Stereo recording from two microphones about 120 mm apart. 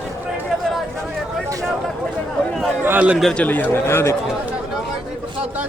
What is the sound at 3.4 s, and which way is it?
Speech, 15° left (ahead or behind).